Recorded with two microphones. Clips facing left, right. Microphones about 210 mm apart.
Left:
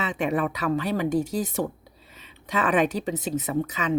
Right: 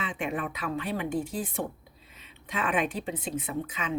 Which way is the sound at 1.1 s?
40° left (ahead or behind).